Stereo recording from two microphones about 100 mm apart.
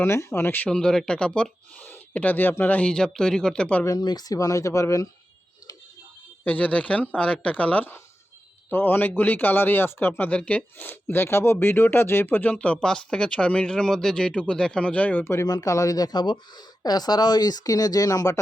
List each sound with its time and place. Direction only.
0.0 s speech: 30° left (ahead or behind)
0.7 s speech: 10° left (ahead or behind)
3.8 s speech: 40° left (ahead or behind)
6.4 s speech: 15° left (ahead or behind)
15.2 s speech: 25° left (ahead or behind)
15.4 s speech: 40° left (ahead or behind)